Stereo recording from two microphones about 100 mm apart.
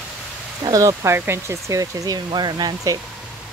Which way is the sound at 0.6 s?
35° right (ahead or behind).